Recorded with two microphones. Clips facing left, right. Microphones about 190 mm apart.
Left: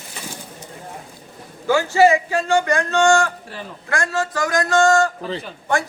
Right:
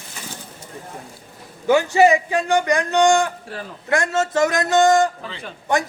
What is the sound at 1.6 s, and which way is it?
A man's voice, 20° right (ahead or behind).